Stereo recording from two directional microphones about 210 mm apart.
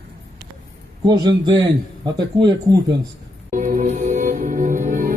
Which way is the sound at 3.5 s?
40° right (ahead or behind).